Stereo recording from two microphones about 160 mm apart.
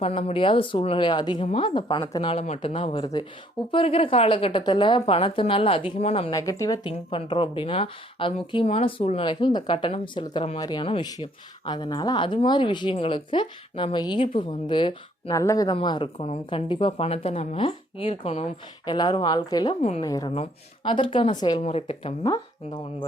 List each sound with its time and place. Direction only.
0.0 s speech: 40° left (ahead or behind)
6.3 s speech: 20° left (ahead or behind)
20.3 s speech: 35° left (ahead or behind)
21.6 s speech: 40° left (ahead or behind)
22.2 s speech: 25° left (ahead or behind)